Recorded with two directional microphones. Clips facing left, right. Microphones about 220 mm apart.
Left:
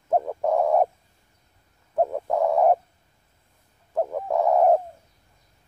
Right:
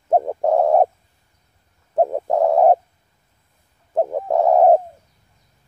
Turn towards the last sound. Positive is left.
turn(degrees=-30)  # may be behind; listen again after turning